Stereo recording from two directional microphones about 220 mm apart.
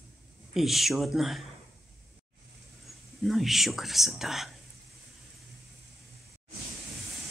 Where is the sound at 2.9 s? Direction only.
Centre (ahead or behind).